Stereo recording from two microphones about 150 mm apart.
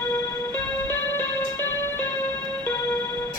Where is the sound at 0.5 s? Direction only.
15° left (ahead or behind).